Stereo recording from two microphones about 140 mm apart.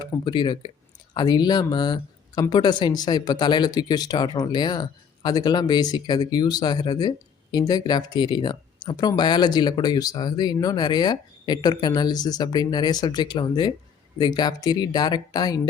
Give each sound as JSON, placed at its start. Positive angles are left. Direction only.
{"t": 0.0, "sound": "speech", "side_deg": 35}